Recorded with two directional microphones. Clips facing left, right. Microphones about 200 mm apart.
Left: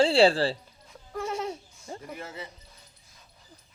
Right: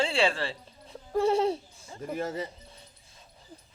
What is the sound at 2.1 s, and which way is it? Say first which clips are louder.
Speech: right 12 dB; 40° right (ahead or behind).